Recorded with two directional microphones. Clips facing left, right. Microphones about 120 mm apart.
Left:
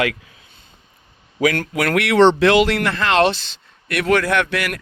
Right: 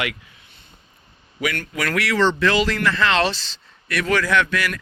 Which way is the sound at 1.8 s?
60° left (ahead or behind).